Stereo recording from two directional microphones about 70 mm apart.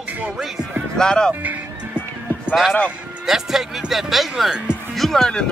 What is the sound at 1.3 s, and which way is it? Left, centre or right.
Speech, right.